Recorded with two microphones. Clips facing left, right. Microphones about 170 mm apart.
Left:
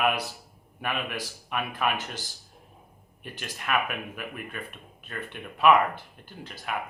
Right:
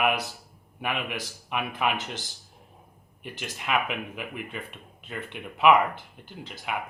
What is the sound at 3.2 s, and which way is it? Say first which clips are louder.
Speech: right 1 dB; 15° right (ahead or behind).